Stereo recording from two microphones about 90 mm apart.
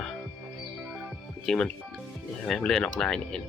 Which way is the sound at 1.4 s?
5° left (ahead or behind).